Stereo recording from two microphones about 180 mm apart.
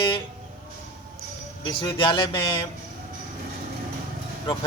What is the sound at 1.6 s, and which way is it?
Speech, 25° left (ahead or behind).